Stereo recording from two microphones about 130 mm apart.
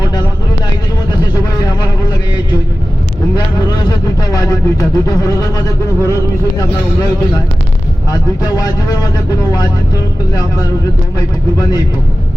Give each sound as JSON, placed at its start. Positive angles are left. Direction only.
{"t": 0.0, "sound": "a sound", "side_deg": 30}
{"t": 3.7, "sound": "speech", "side_deg": 30}
{"t": 8.4, "sound": "speech", "side_deg": 30}